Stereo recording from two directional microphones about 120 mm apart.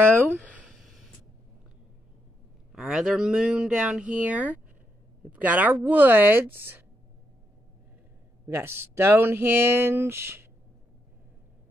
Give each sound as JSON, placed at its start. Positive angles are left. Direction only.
{"t": 0.7, "sound": "a sound", "side_deg": 0}
{"t": 2.7, "sound": "speech", "side_deg": -5}
{"t": 8.5, "sound": "speech", "side_deg": -20}